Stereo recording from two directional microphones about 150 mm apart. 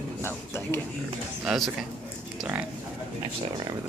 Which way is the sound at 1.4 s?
5° right (ahead or behind).